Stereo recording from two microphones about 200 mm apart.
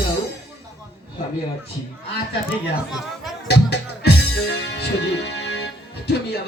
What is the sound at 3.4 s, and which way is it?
A man's voice, 60° left (ahead or behind).